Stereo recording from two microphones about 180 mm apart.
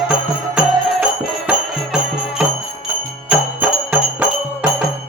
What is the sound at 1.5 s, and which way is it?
Music, 5° right (ahead or behind).